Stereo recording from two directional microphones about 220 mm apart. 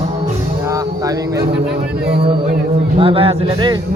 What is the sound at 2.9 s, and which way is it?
Speech, 25° right (ahead or behind).